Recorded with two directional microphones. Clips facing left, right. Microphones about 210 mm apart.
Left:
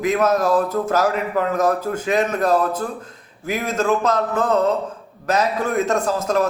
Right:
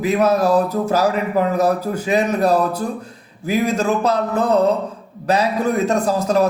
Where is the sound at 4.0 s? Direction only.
35° right (ahead or behind).